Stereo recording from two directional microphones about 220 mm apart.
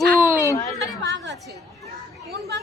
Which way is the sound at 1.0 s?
55° right (ahead or behind).